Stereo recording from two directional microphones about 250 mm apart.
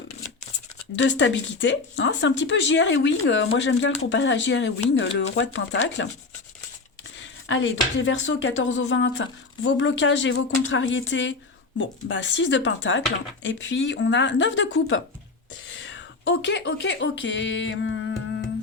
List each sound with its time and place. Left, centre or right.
0.9 s speech: left
7.4 s speech: left